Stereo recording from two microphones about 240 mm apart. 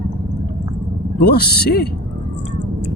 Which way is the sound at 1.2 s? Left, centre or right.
Left.